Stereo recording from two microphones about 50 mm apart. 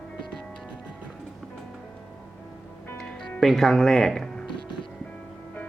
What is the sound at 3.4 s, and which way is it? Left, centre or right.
Speech, centre.